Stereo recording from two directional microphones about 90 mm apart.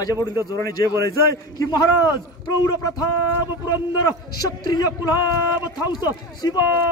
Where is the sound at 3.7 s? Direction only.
40° left (ahead or behind).